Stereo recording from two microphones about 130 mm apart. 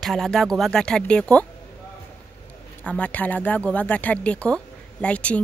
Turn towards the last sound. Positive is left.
turn(degrees=10)  # may be behind; listen again after turning